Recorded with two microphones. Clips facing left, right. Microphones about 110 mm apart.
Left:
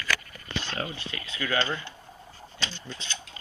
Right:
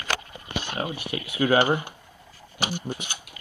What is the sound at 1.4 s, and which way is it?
Speech, 40° right (ahead or behind).